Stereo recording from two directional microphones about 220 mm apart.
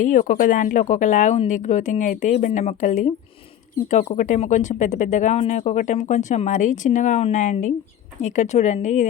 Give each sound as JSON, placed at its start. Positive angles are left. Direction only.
{"t": 0.0, "sound": "speech", "side_deg": 35}